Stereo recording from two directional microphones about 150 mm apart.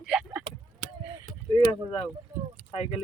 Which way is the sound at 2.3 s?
25° right (ahead or behind).